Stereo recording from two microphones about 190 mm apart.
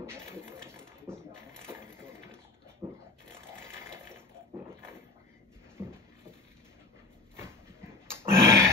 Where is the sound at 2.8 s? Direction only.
20° right (ahead or behind).